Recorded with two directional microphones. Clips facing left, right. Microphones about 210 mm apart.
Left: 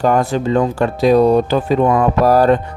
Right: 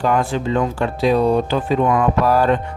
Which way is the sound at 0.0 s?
40° left (ahead or behind).